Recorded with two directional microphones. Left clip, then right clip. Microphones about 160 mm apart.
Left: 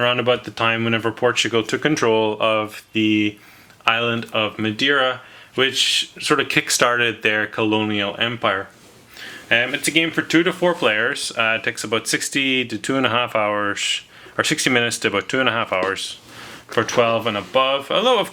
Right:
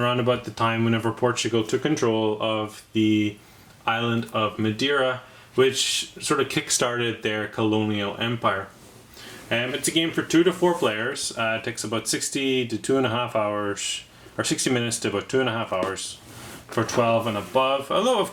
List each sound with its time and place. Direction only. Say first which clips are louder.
0.0 s speech: left 5 dB; 20° left (ahead or behind)
9.5 s speech: left 7 dB; 20° left (ahead or behind)